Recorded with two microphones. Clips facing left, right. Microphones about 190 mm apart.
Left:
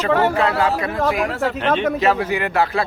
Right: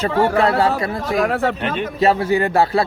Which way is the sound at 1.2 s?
60° right (ahead or behind).